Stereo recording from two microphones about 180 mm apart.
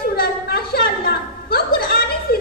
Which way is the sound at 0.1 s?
60° left (ahead or behind).